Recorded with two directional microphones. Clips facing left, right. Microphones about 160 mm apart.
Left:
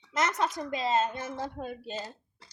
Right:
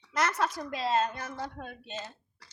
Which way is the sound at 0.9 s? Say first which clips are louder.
Even; 20° left (ahead or behind).